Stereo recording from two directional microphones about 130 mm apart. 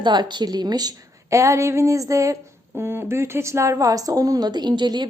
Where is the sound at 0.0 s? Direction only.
35° right (ahead or behind).